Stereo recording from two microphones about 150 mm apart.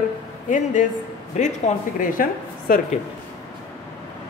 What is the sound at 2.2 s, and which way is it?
Speech, 70° left (ahead or behind).